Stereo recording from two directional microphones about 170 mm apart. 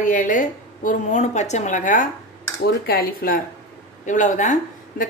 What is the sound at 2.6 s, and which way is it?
Speech, 65° left (ahead or behind).